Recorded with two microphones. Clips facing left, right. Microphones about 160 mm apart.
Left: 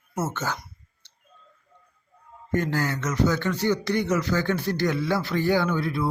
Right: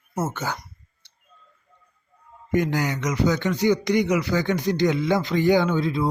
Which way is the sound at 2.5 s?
15° right (ahead or behind).